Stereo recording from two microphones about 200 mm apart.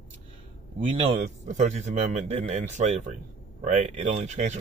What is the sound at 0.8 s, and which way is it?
Speech, 35° right (ahead or behind).